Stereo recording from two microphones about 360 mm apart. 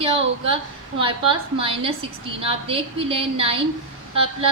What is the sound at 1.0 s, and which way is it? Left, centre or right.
A woman's voice, centre.